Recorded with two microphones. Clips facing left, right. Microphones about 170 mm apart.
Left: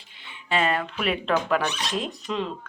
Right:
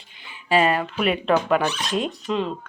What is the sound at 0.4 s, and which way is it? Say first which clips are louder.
Speech: right 5 dB; 10° right (ahead or behind).